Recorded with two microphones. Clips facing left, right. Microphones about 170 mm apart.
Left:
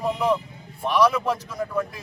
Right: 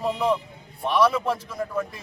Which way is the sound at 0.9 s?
30° right (ahead or behind).